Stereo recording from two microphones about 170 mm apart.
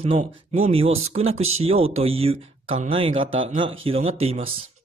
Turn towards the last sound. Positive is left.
turn(degrees=-35)  # may be behind; listen again after turning